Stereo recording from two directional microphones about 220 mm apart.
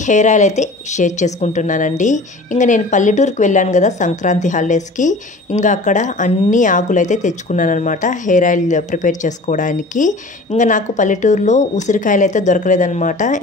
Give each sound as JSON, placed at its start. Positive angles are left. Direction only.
{"t": 0.0, "sound": "speech", "side_deg": 35}